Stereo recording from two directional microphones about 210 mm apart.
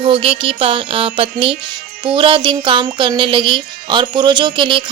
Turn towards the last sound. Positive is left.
turn(degrees=-25)  # may be behind; listen again after turning